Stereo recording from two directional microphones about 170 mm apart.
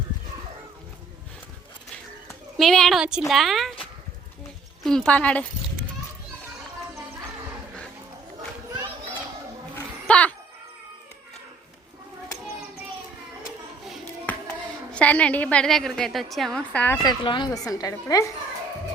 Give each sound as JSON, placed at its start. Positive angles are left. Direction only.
{"t": 2.2, "sound": "speech", "side_deg": 0}
{"t": 9.7, "sound": "roaring cats", "side_deg": 10}
{"t": 14.9, "sound": "a woman's voice", "side_deg": 5}
{"t": 17.0, "sound": "a woman's voice", "side_deg": 25}